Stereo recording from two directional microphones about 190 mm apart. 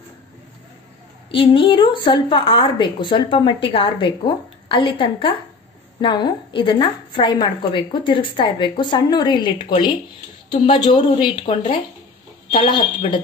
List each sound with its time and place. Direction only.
1.3 s a woman's voice: 25° left (ahead or behind)